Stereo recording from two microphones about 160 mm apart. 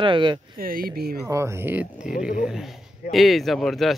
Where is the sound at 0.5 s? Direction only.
65° right (ahead or behind).